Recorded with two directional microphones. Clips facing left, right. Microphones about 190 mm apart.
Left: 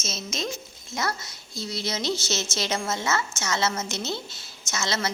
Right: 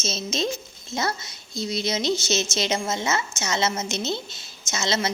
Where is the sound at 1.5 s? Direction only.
20° right (ahead or behind).